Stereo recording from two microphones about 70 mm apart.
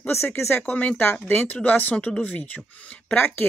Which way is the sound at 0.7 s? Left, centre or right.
Centre.